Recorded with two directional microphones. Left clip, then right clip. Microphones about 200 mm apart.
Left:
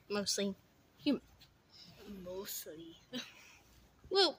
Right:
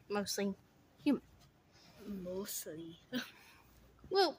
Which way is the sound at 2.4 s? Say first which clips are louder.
Right 2 dB; 55° right (ahead or behind).